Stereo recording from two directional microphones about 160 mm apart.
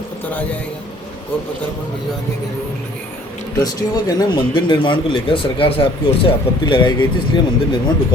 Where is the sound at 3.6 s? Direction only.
25° left (ahead or behind).